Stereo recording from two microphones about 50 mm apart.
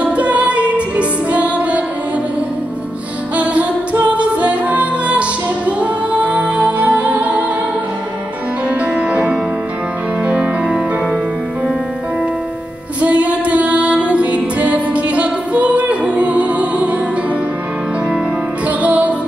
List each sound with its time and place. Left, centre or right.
0.0 s music: right
3.3 s music: right
8.6 s music: right
13.0 s music: right
18.7 s music: right